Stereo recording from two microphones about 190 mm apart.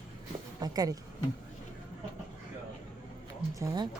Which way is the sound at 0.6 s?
20° right (ahead or behind).